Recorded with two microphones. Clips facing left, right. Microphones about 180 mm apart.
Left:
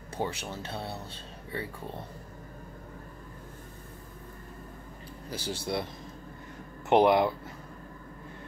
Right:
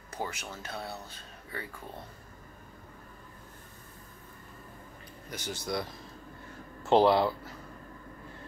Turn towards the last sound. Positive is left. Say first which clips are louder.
# left 1 dB
turn(degrees=20)  # may be behind; listen again after turning